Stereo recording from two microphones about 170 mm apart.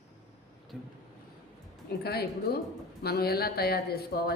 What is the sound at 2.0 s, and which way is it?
Speech, 65° left (ahead or behind).